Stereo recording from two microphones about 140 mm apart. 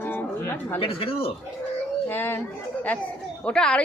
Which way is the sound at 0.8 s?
40° left (ahead or behind).